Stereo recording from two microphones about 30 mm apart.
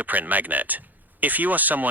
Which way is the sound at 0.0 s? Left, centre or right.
Right.